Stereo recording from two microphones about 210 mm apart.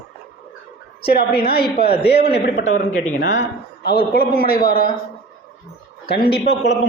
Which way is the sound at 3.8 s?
45° left (ahead or behind).